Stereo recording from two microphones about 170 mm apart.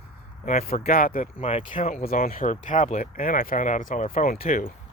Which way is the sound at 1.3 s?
35° left (ahead or behind).